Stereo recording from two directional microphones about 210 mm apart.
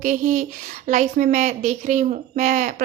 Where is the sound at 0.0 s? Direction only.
40° right (ahead or behind).